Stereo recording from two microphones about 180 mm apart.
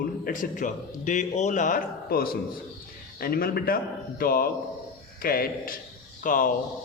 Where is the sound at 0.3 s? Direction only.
45° left (ahead or behind).